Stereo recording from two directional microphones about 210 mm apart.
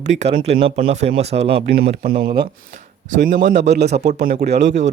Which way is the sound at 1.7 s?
45° right (ahead or behind).